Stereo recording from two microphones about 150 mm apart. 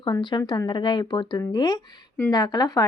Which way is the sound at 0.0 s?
30° left (ahead or behind).